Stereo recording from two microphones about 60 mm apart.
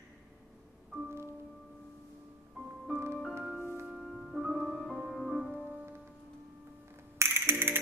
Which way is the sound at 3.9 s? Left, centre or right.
Centre.